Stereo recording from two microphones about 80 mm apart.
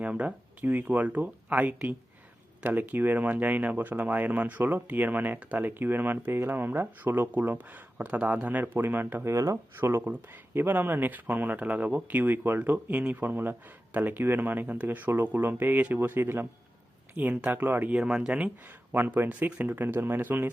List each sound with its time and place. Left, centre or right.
0.0 s speech: centre
17.9 s speech: centre